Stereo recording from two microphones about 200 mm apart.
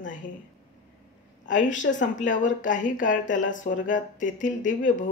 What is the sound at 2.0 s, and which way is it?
Speech, 40° left (ahead or behind).